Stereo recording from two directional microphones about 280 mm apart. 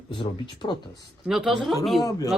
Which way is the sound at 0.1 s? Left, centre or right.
Centre.